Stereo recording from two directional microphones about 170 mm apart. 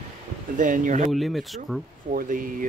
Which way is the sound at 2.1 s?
50° right (ahead or behind).